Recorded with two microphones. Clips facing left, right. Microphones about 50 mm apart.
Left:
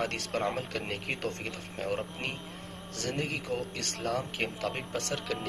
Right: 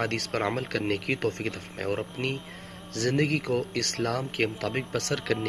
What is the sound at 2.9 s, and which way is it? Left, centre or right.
Speech, right.